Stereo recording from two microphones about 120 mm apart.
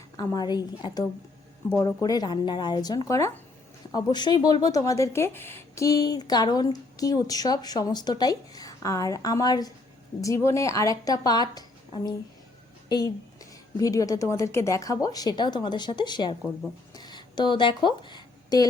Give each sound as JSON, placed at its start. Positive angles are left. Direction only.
{"t": 0.2, "sound": "a woman's voice", "side_deg": 35}
{"t": 3.9, "sound": "a woman's voice", "side_deg": 35}
{"t": 12.9, "sound": "a woman's voice", "side_deg": 30}
{"t": 16.9, "sound": "a sound", "side_deg": 35}